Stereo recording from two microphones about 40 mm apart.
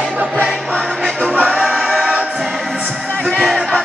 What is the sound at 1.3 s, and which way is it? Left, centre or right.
Music, right.